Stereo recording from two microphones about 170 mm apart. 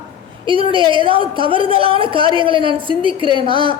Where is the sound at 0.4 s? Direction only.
30° right (ahead or behind).